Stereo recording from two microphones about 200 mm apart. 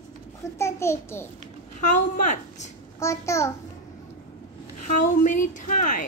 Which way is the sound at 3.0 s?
15° left (ahead or behind).